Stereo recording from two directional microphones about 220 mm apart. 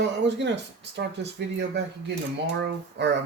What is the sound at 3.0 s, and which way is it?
Speech, 50° right (ahead or behind).